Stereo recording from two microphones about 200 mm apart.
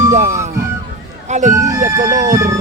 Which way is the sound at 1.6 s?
15° right (ahead or behind).